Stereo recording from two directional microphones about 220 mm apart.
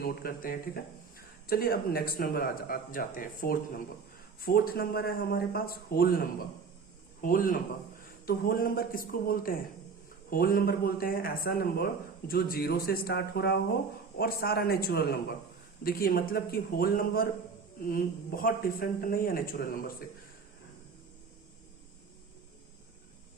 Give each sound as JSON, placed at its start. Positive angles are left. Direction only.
{"t": 0.0, "sound": "speech", "side_deg": 45}